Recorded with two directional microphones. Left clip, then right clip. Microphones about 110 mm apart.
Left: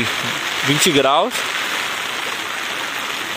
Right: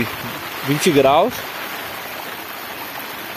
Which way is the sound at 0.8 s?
5° left (ahead or behind).